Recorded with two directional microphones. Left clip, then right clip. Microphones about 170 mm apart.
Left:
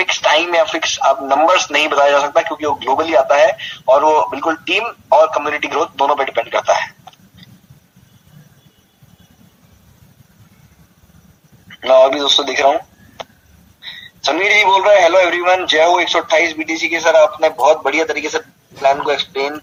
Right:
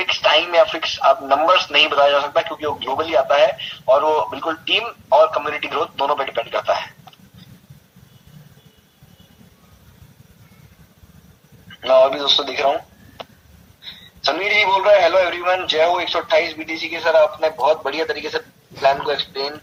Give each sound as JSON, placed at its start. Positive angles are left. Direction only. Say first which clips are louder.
{"t": 0.0, "sound": "speech", "louder": "left 3 dB", "side_deg": 35}
{"t": 11.7, "sound": "a man's voice", "louder": "left 4 dB", "side_deg": 35}